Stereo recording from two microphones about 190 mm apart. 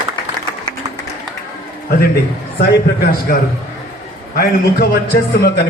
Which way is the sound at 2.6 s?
50° left (ahead or behind).